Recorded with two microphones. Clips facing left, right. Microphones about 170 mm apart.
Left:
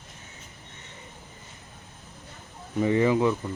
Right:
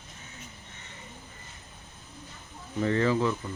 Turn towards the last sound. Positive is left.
turn(degrees=15)  # may be behind; listen again after turning